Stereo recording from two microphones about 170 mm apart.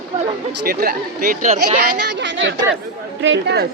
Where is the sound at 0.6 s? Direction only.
60° right (ahead or behind).